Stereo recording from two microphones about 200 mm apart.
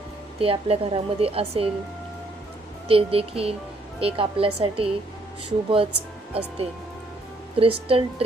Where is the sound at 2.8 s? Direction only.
30° right (ahead or behind).